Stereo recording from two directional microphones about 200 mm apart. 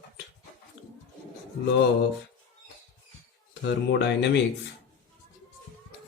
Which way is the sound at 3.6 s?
60° left (ahead or behind).